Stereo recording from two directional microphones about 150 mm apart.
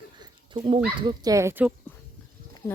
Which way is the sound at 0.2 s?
30° right (ahead or behind).